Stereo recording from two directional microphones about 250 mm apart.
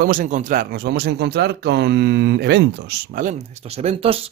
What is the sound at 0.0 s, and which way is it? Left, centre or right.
Speech, right.